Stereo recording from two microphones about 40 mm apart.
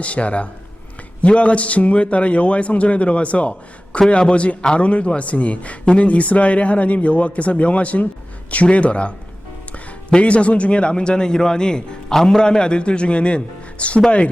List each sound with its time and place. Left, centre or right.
0.0 s a man's voice: left